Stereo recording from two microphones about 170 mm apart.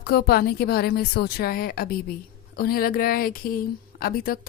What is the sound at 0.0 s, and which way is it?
Speech, 65° left (ahead or behind).